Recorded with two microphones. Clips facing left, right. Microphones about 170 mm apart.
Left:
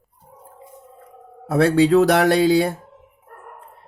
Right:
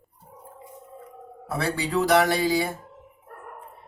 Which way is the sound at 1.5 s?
65° left (ahead or behind).